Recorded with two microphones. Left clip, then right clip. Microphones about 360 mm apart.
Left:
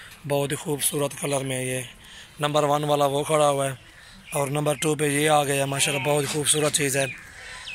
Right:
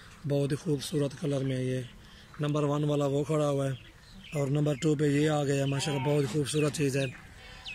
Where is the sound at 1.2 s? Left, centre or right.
Left.